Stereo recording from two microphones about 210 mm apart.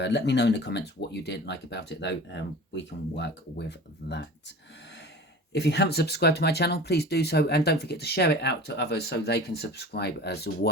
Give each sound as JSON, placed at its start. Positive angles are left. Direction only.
{"t": 0.0, "sound": "speech", "side_deg": 55}
{"t": 5.5, "sound": "speech", "side_deg": 55}